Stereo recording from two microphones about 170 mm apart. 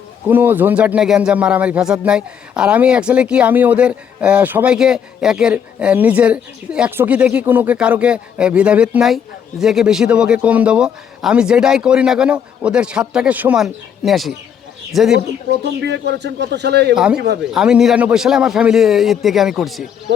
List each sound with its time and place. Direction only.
0.3 s a man's voice: 10° right (ahead or behind)
15.4 s a man's voice: 85° right
16.9 s a man's voice: 5° right (ahead or behind)